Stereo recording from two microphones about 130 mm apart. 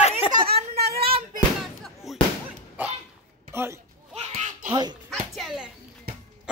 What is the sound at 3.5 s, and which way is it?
Speech, 20° right (ahead or behind).